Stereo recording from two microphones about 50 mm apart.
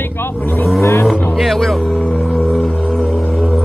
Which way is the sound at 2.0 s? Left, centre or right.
Centre.